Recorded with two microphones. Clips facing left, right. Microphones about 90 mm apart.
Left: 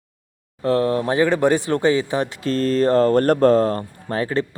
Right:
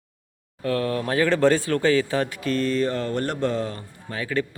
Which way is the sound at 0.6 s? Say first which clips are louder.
Left 6 dB; 30° left (ahead or behind).